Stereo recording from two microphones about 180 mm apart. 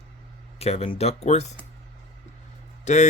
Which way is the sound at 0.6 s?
35° left (ahead or behind).